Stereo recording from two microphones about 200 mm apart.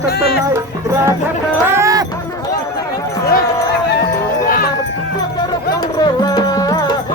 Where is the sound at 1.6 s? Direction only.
15° right (ahead or behind).